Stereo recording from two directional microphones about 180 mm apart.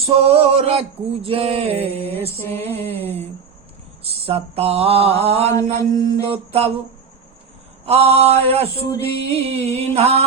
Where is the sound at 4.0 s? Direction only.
35° right (ahead or behind).